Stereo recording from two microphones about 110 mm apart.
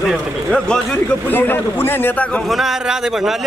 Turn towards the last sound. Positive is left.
turn(degrees=-5)  # may be behind; listen again after turning